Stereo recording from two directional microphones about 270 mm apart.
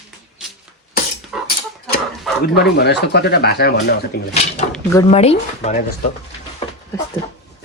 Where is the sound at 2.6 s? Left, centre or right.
Left.